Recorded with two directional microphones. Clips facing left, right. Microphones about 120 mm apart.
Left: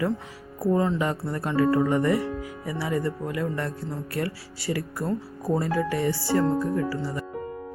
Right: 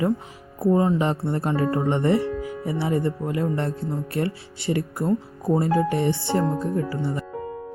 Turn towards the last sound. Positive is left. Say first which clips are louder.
# right 2 dB
turn(degrees=-25)  # may be behind; listen again after turning